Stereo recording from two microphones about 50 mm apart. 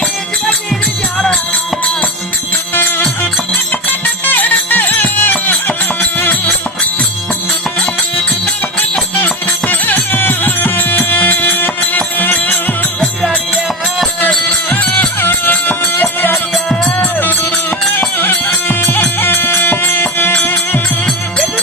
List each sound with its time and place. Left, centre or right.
3.7 s music: left
9.2 s music: left
14.3 s music: left
16.6 s music: centre
17.2 s music: left